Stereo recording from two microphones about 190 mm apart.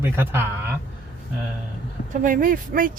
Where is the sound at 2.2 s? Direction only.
45° right (ahead or behind).